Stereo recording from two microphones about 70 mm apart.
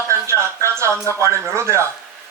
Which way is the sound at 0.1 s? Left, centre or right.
Right.